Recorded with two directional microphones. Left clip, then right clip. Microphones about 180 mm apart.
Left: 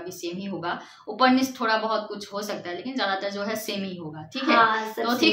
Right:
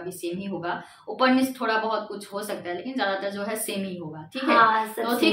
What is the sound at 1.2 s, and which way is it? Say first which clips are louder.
A woman's voice: left 1 dB; 15° left (ahead or behind).